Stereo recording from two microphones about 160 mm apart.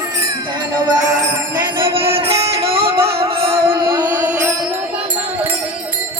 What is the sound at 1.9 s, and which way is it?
Music, 35° right (ahead or behind).